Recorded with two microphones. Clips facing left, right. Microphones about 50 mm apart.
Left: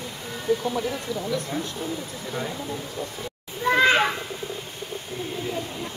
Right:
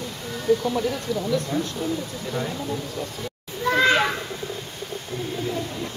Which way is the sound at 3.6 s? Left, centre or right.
Centre.